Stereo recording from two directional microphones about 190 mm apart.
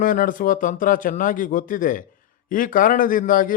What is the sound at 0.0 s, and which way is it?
A man's voice, 45° left (ahead or behind).